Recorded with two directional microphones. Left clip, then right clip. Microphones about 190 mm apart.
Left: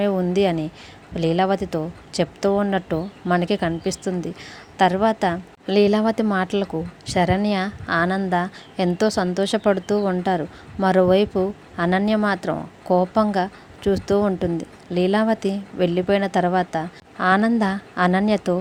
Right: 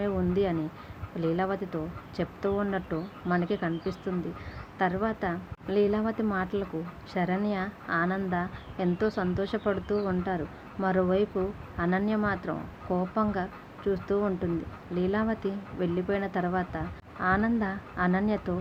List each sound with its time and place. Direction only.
0.0 s speech: 40° left (ahead or behind)